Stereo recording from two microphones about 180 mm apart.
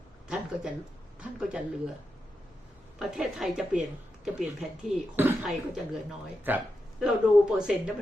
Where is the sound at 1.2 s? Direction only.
5° right (ahead or behind).